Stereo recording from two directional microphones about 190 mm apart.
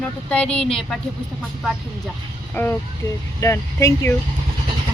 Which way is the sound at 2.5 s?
10° left (ahead or behind).